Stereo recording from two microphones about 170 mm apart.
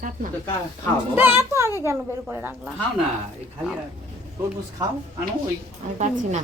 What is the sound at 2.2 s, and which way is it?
Speech, 10° right (ahead or behind).